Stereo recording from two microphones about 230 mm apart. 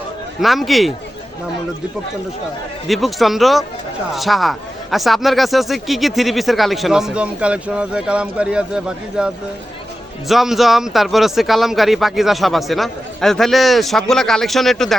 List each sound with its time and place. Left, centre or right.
0.4 s a man's voice: centre
2.8 s a man's voice: centre